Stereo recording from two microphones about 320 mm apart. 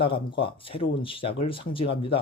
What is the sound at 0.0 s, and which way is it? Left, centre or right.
Speech, centre.